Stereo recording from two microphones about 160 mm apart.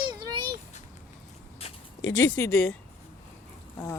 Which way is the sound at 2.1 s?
15° left (ahead or behind).